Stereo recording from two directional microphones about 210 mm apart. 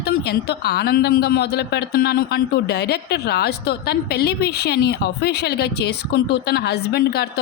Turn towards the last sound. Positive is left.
turn(degrees=50)  # may be behind; listen again after turning